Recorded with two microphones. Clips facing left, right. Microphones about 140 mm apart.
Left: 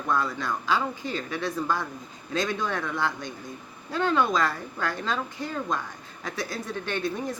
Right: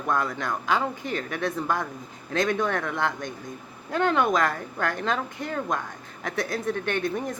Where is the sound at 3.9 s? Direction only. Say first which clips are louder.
Right 2 dB; 55° right (ahead or behind).